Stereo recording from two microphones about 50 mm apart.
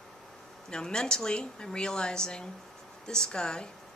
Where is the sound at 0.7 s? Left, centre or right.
Centre.